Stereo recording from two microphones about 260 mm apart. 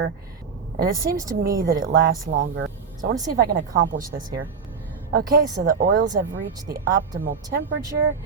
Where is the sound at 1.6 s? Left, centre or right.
Right.